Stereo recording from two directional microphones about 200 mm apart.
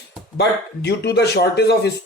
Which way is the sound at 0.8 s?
55° left (ahead or behind).